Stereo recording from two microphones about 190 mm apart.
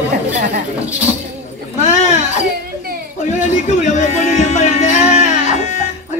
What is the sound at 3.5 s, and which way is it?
Music, 40° left (ahead or behind).